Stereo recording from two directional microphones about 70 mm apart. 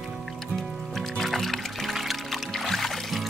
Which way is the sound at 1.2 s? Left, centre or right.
Centre.